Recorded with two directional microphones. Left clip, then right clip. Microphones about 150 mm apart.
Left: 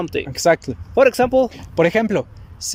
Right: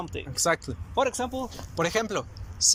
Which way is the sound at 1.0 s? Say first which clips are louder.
Left 13 dB; 60° left (ahead or behind).